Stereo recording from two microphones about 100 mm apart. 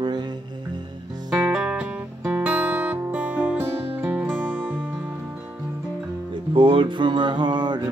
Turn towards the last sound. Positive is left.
turn(degrees=-50)  # may be behind; listen again after turning